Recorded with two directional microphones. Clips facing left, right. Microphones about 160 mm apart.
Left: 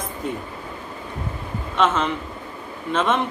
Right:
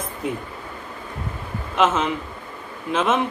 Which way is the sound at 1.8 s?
5° right (ahead or behind).